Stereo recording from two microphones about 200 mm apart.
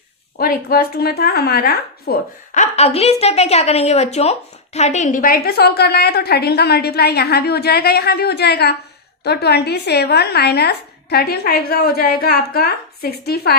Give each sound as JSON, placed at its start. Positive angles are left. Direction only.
{"t": 0.3, "sound": "a woman's voice", "side_deg": 50}